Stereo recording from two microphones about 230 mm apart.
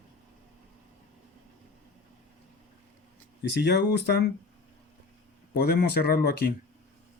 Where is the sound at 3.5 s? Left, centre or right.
Left.